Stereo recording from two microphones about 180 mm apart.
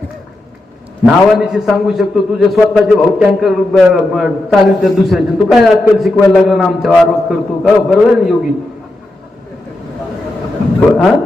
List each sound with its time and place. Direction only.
1.0 s a man's voice: 5° right (ahead or behind)